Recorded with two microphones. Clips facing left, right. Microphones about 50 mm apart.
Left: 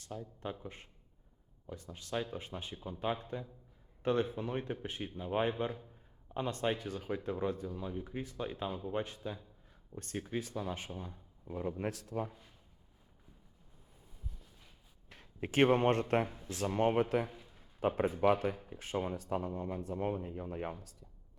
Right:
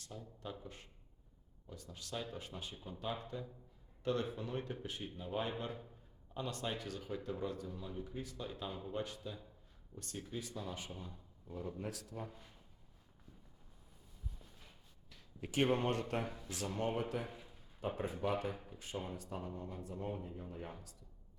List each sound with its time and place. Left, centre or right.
0.1 s a man's voice: left
9.9 s speech: centre
10.3 s speech: left
10.9 s a man's voice: left
12.3 s speech: centre
15.1 s speech: left
16.2 s speech: left
16.6 s speech: left
17.2 s a sound: centre
17.7 s speech: left